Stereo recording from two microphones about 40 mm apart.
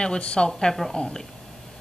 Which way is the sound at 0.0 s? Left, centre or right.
Left.